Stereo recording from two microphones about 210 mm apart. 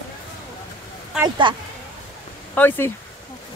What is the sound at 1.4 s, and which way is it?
Speech, 20° right (ahead or behind).